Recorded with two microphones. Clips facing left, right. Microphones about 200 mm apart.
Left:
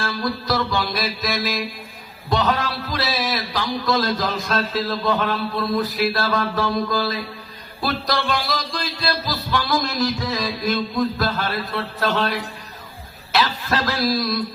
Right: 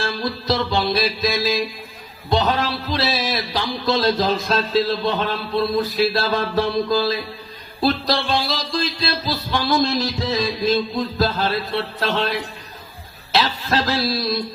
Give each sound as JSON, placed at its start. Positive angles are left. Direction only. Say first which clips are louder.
{"t": 0.0, "sound": "music", "louder": "right 1 dB", "side_deg": -25}
{"t": 2.3, "sound": "a man's voice", "louder": "right 1 dB", "side_deg": -25}
{"t": 13.3, "sound": "a man's voice", "louder": "right 1 dB", "side_deg": -25}